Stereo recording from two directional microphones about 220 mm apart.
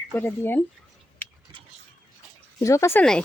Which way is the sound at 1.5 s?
20° right (ahead or behind).